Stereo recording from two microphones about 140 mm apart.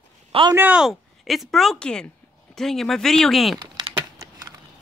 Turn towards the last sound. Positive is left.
turn(degrees=-25)  # may be behind; listen again after turning